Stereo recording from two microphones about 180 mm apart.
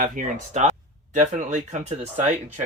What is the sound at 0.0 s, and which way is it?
Speech, 45° right (ahead or behind).